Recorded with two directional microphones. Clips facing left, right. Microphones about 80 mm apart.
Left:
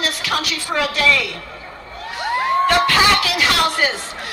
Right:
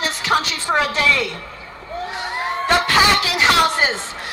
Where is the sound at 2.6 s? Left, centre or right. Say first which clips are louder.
Right 2 dB; right.